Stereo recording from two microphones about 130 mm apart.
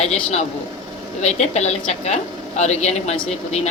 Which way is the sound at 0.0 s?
55° left (ahead or behind).